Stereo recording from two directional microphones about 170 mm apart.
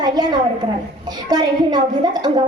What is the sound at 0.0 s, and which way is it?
A woman's voice, 25° right (ahead or behind).